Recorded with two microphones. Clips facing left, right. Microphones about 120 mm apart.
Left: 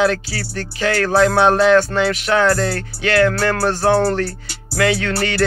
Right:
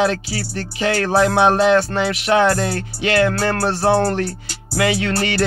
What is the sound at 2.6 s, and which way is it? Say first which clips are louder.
Speech: left 1 dB; 15° right (ahead or behind).